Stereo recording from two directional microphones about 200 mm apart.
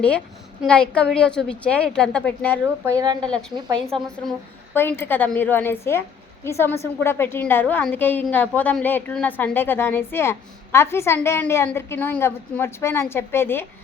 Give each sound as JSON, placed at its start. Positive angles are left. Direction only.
{"t": 0.6, "sound": "a woman's voice", "side_deg": 5}
{"t": 2.6, "sound": "speech", "side_deg": -15}
{"t": 4.3, "sound": "a woman's voice", "side_deg": 10}